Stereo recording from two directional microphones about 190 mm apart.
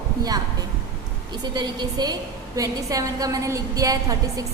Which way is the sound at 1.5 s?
20° right (ahead or behind).